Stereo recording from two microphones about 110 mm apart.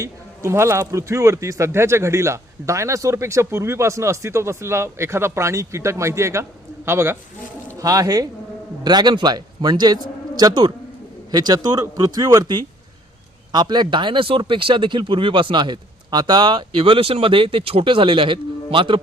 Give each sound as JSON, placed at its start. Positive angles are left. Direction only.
{"t": 0.0, "sound": "speech", "side_deg": -25}
{"t": 7.8, "sound": "a man's voice", "side_deg": -30}